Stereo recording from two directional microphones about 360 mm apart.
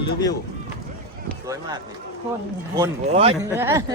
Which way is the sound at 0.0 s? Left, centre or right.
Centre.